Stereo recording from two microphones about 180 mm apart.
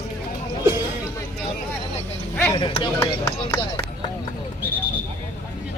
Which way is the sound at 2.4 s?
20° left (ahead or behind).